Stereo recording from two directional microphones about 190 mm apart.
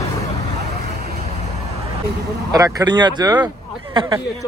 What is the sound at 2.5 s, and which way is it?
Speech, 20° right (ahead or behind).